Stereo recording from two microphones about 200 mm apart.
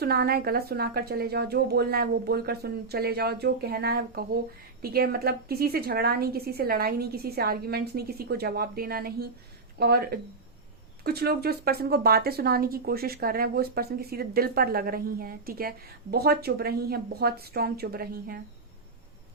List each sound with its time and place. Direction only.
0.0 s speech: 50° right (ahead or behind)